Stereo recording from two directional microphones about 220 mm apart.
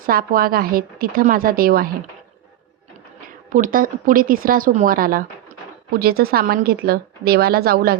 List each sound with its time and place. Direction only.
0.0 s a woman's voice: 40° right (ahead or behind)
3.5 s a woman's voice: 40° right (ahead or behind)